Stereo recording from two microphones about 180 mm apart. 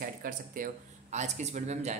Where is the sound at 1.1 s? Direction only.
40° right (ahead or behind).